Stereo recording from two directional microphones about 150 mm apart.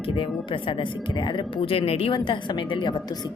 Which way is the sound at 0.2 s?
35° left (ahead or behind).